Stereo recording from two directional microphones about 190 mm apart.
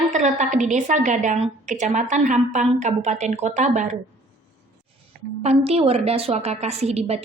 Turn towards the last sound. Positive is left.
turn(degrees=-35)  # may be behind; listen again after turning